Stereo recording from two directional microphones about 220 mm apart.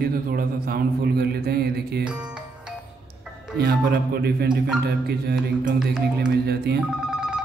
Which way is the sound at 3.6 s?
45° right (ahead or behind).